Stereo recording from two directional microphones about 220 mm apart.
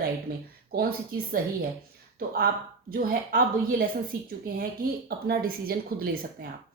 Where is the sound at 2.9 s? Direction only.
40° right (ahead or behind).